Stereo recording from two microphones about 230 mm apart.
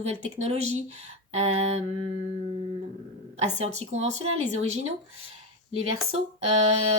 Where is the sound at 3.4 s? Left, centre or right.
Right.